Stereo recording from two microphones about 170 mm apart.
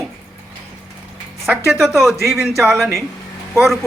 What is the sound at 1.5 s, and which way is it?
Speech, 15° right (ahead or behind).